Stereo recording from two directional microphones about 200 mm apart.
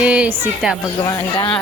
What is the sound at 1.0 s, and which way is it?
Speech, 20° left (ahead or behind).